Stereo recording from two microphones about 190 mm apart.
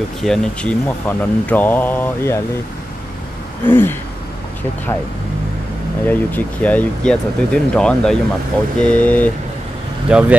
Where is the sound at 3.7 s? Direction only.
10° left (ahead or behind).